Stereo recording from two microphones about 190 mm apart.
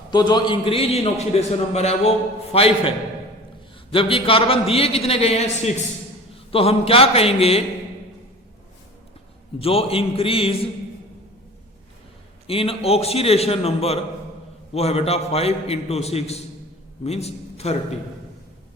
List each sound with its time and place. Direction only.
0.1 s a man's voice: 20° left (ahead or behind)
3.9 s a man's voice: 30° left (ahead or behind)
9.6 s a man's voice: 30° left (ahead or behind)
12.5 s a man's voice: 30° left (ahead or behind)